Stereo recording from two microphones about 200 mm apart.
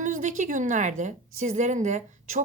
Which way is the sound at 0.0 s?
40° right (ahead or behind).